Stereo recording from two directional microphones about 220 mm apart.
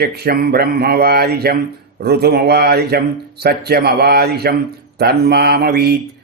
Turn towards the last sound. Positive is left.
turn(degrees=-45)  # may be behind; listen again after turning